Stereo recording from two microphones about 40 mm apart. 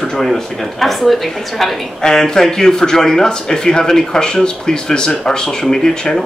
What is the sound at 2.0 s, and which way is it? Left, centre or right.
Speech, centre.